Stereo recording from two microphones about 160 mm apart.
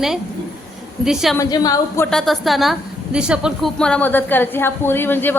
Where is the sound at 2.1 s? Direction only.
Centre (ahead or behind).